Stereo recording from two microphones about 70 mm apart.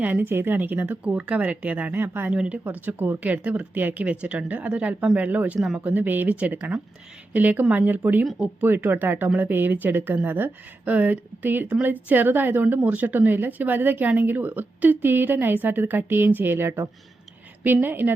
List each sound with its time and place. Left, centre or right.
0.0 s speech: right
2.3 s speech: centre
2.6 s speech: right
5.5 s speech: centre
5.8 s speech: right